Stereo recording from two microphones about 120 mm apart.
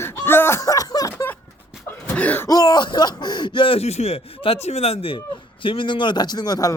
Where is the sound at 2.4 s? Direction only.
30° left (ahead or behind).